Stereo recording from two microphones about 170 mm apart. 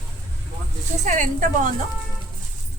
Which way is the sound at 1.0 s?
45° right (ahead or behind).